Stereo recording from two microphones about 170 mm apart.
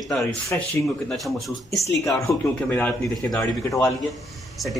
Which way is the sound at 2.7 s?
10° left (ahead or behind).